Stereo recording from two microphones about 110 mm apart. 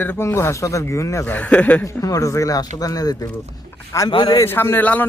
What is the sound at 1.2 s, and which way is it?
Speech, 15° left (ahead or behind).